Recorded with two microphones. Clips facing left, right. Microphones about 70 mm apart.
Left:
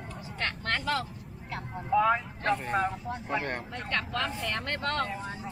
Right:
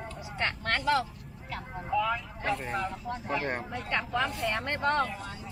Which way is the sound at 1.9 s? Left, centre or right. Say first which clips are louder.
Left 4 dB; left.